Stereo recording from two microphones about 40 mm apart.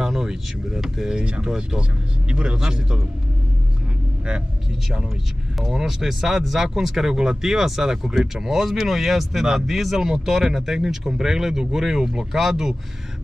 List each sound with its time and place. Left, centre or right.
0.0 s speech: centre
5.6 s speech: centre